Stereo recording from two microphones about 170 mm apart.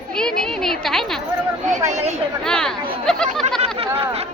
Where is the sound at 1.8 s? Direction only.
40° right (ahead or behind).